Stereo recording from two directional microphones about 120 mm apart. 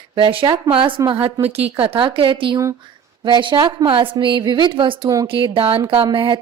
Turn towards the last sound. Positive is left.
turn(degrees=-45)  # may be behind; listen again after turning